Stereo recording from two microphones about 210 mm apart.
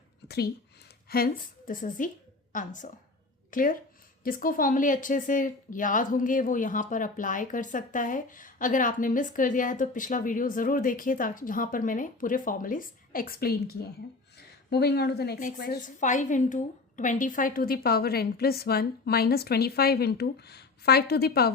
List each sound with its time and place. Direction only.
0.3 s a woman's voice: 50° left (ahead or behind)
14.7 s a woman's voice: 50° left (ahead or behind)